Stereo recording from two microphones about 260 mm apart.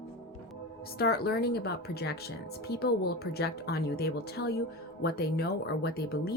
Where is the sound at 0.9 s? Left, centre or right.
Left.